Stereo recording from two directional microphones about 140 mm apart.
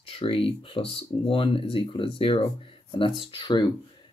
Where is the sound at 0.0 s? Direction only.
40° left (ahead or behind).